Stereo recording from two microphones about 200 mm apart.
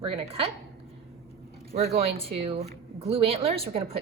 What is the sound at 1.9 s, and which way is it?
A woman's voice, 30° right (ahead or behind).